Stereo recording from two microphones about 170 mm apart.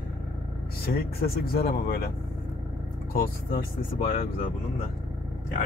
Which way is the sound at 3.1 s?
55° left (ahead or behind).